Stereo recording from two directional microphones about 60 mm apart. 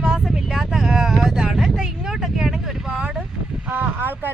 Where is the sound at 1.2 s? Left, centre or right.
Centre.